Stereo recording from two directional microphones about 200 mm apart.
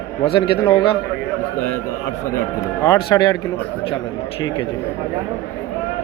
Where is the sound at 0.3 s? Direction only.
25° left (ahead or behind).